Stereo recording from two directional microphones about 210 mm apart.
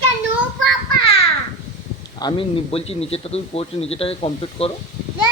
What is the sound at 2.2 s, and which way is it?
Speech, 25° left (ahead or behind).